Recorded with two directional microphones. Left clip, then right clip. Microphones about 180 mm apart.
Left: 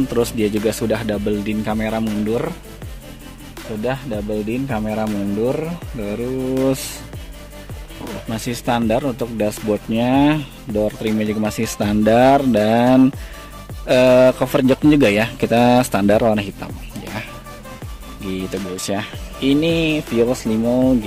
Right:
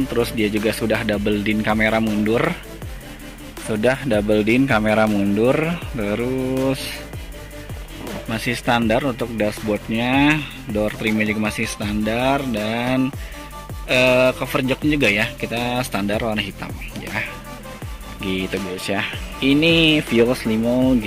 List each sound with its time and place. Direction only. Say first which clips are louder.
0.1 s speech: left 2 dB; 20° left (ahead or behind); by 2.5 s centre (ahead or behind)
3.8 s speech: right 5 dB; 20° right (ahead or behind); by 6.7 s centre (ahead or behind)
8.3 s speech: right 1 dB; 15° left (ahead or behind)
11.4 s speech: left 1 dB; 30° left (ahead or behind)
11.8 s speech: left 9 dB; 40° left (ahead or behind)
16.5 s music: right 1 dB; 15° left (ahead or behind)
18.2 s speech: right 2 dB; 10° left (ahead or behind)